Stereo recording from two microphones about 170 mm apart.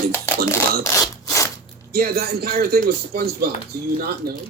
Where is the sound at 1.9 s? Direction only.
65° right (ahead or behind).